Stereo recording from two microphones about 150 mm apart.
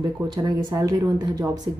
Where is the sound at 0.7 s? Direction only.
25° right (ahead or behind).